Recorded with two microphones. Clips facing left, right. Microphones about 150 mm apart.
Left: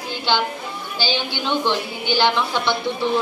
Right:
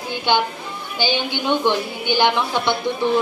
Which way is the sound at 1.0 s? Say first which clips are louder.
Right 3 dB; 55° right (ahead or behind).